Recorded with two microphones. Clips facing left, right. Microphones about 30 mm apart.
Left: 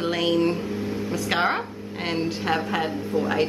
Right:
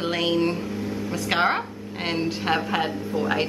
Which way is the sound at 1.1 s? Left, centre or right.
Centre.